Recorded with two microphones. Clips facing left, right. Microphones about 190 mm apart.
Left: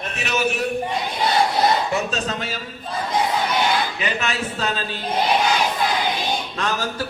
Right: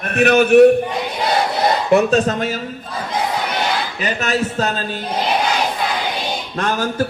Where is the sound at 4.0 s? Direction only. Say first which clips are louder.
Right 5 dB; 40° right (ahead or behind).